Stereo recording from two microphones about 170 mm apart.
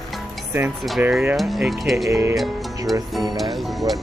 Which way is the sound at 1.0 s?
10° right (ahead or behind).